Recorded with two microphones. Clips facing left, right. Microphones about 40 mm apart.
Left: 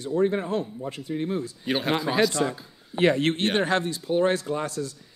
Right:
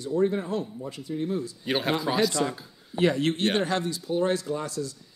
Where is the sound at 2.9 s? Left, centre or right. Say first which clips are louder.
Left 2 dB; left.